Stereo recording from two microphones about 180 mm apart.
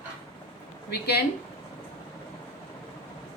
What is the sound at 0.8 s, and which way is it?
Speech, 65° left (ahead or behind).